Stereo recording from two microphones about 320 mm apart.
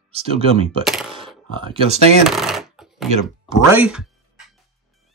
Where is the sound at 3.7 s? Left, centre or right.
Centre.